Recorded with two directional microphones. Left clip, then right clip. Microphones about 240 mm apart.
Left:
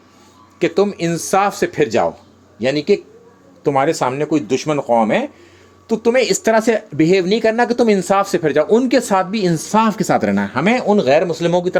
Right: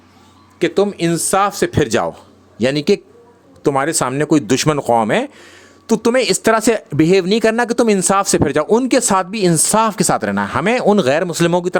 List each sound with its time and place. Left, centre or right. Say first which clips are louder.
0.6 s speech: right 1 dB; centre; by 11.8 s right